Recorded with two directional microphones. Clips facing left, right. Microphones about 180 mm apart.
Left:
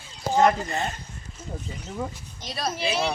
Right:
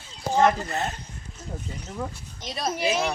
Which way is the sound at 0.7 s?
Centre (ahead or behind).